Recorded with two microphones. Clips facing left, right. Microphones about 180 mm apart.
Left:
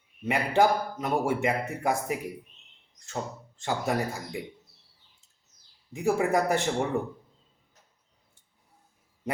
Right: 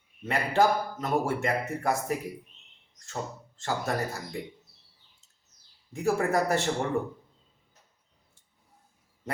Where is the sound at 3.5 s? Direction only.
15° left (ahead or behind).